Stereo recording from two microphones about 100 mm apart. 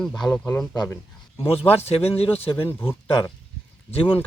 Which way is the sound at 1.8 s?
90° left.